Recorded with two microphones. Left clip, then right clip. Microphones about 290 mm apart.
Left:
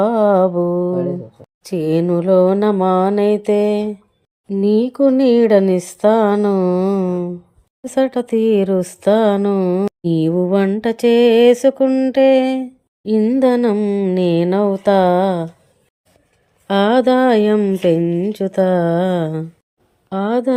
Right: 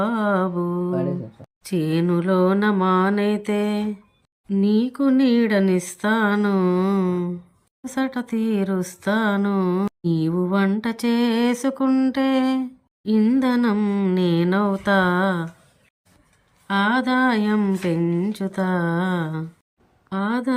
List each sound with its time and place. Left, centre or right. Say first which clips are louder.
0.0 s mantra: left 9 dB; centre
0.4 s mantra: left 9 dB; left
1.6 s speech: left 6 dB; centre
16.6 s speech: left 7 dB; centre